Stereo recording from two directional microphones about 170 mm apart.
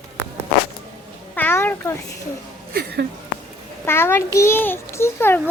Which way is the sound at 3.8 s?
15° left (ahead or behind).